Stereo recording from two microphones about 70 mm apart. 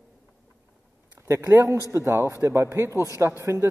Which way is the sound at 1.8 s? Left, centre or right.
Right.